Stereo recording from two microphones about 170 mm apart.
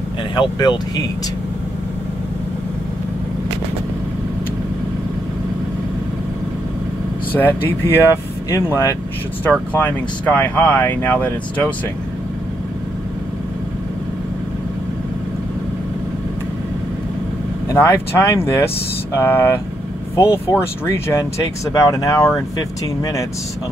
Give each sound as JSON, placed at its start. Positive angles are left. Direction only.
{"t": 0.4, "sound": "speech", "side_deg": 25}
{"t": 7.3, "sound": "speech", "side_deg": 10}
{"t": 17.6, "sound": "speech", "side_deg": 15}